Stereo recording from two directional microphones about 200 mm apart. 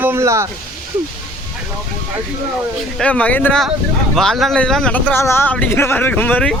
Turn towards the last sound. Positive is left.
turn(degrees=5)  # may be behind; listen again after turning